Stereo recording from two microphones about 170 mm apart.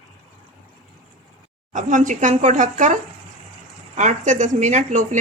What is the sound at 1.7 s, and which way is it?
Speech, 50° right (ahead or behind).